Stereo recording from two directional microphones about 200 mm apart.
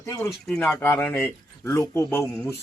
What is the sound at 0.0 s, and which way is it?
A man's voice, 10° left (ahead or behind).